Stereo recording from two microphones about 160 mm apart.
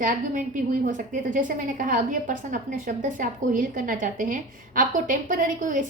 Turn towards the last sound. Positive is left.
turn(degrees=-55)  # may be behind; listen again after turning